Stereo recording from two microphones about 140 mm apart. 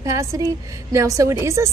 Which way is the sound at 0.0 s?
25° right (ahead or behind).